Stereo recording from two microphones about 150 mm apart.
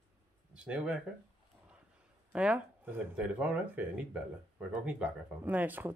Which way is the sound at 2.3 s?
10° right (ahead or behind).